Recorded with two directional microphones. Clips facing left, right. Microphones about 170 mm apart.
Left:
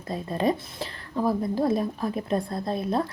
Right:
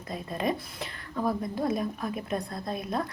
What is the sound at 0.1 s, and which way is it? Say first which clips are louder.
A woman's voice: left 5 dB; 30° left (ahead or behind).